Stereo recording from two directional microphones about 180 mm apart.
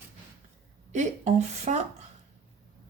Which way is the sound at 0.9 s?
40° right (ahead or behind).